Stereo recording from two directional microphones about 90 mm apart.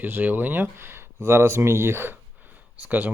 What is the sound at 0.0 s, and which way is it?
Speech, 20° right (ahead or behind).